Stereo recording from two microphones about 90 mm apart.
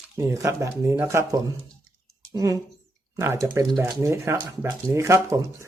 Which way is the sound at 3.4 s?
35° right (ahead or behind).